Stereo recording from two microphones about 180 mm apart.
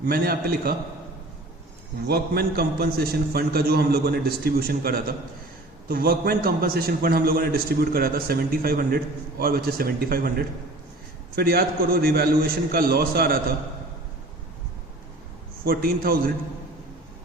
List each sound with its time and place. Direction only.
0.0 s a man's voice: 55° right (ahead or behind)
2.0 s a man's voice: 60° right (ahead or behind)
15.6 s a man's voice: 55° right (ahead or behind)